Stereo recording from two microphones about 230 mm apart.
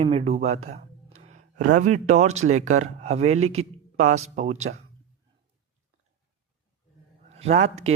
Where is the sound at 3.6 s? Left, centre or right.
Right.